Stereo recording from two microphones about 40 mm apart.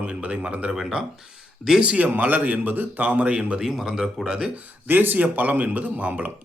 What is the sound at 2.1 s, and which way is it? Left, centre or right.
Speech, right.